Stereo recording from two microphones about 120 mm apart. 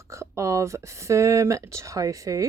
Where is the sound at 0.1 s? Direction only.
25° right (ahead or behind).